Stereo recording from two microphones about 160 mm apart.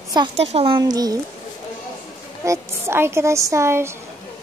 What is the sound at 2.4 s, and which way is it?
A woman's voice, 15° right (ahead or behind).